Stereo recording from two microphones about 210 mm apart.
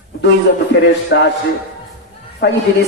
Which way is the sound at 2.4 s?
55° left (ahead or behind).